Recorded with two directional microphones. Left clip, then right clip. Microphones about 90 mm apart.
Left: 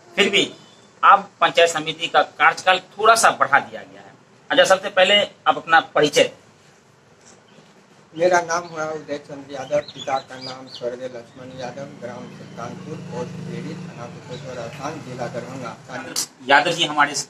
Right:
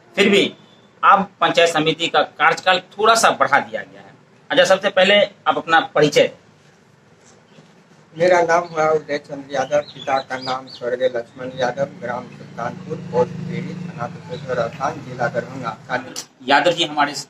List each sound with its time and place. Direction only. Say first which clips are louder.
0.1 s a man's voice: right 3 dB; 30° right (ahead or behind)
8.2 s a man's voice: right 4 dB; 35° right (ahead or behind)